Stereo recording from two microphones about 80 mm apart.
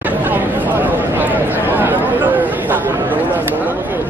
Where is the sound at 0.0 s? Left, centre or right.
Right.